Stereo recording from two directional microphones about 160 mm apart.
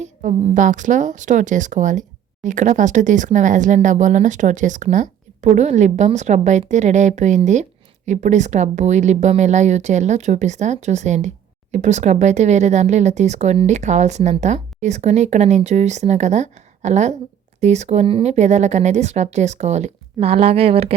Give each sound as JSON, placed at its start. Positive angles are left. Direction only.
{"t": 0.0, "sound": "a woman's voice", "side_deg": -50}